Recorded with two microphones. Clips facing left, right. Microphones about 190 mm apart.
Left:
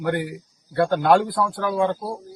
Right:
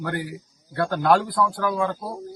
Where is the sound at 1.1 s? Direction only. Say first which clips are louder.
Left 2 dB; 20° left (ahead or behind).